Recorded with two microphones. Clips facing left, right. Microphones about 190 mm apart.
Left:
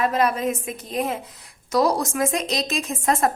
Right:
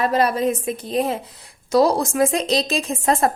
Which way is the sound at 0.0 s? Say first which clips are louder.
Right 3 dB; 35° right (ahead or behind).